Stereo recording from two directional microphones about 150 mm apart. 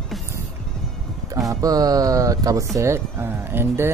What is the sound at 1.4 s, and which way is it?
Speech, 25° right (ahead or behind).